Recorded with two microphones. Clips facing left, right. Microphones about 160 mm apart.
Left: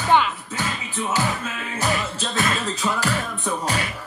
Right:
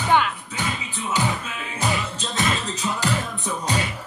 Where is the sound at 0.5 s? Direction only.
15° right (ahead or behind).